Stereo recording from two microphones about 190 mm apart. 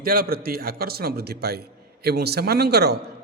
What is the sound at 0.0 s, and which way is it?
A man's voice, 50° right (ahead or behind).